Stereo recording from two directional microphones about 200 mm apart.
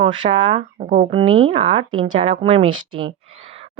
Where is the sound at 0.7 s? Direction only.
40° right (ahead or behind).